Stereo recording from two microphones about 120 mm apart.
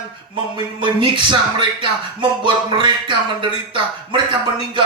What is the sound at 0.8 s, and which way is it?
Speech, 40° right (ahead or behind).